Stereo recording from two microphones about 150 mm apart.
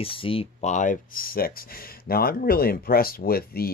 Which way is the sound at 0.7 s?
60° left (ahead or behind).